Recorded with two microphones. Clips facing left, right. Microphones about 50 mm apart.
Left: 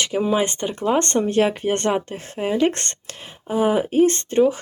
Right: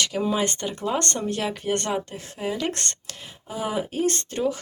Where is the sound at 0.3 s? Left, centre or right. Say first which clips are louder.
Left 4 dB; left.